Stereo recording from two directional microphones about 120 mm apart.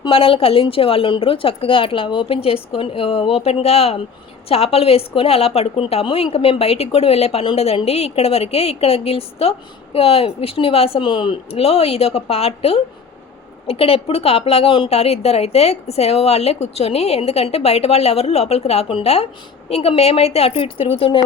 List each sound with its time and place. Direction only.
0.1 s a woman's voice: 50° left (ahead or behind)